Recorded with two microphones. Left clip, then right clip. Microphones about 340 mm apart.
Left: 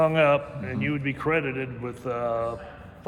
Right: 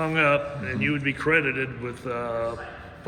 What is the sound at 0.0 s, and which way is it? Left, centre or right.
A man's voice, left.